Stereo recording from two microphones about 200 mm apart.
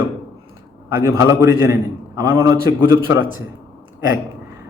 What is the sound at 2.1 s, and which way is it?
Speech, 20° right (ahead or behind).